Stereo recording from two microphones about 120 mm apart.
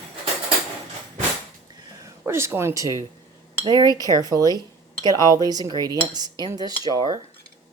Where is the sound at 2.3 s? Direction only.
20° right (ahead or behind).